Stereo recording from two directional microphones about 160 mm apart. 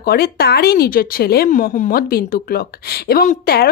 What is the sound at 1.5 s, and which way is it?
A woman's voice, 55° left (ahead or behind).